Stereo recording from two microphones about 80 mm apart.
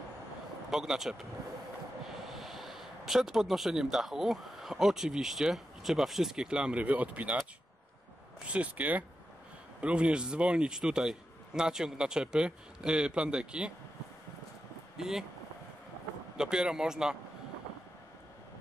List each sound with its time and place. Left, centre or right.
0.7 s speech: centre
2.2 s speech: centre
8.5 s a man's voice: centre
15.0 s speech: centre
16.3 s a man's voice: centre